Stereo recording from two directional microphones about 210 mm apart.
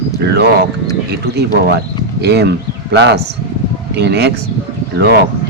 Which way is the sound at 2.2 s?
50° right (ahead or behind).